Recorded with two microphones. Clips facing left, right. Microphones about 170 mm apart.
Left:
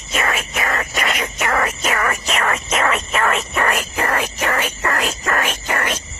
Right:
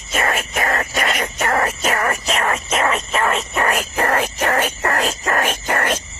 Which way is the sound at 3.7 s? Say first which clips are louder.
Right 2 dB; 45° right (ahead or behind).